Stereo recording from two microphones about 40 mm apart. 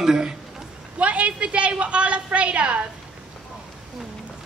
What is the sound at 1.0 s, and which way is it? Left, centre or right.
A woman's voice, right.